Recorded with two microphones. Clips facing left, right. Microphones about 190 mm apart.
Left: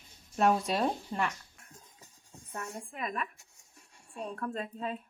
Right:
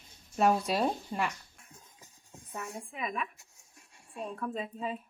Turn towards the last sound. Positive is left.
turn(degrees=-5)  # may be behind; listen again after turning